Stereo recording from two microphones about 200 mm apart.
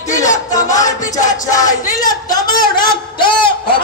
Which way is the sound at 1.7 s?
40° left (ahead or behind).